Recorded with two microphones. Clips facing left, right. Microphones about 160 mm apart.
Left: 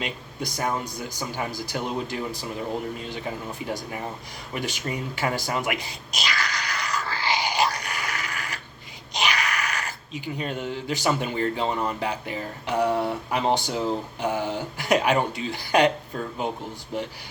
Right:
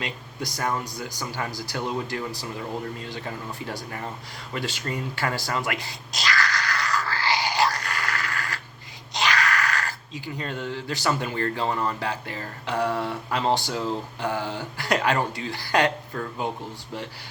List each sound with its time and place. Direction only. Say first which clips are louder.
0.0 s speech: left 1 dB; 20° left (ahead or behind)
4.5 s a sound: even; 15° left (ahead or behind)
9.1 s speech: right 2 dB; 15° left (ahead or behind)